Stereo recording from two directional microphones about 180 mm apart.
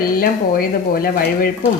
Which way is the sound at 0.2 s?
55° left (ahead or behind).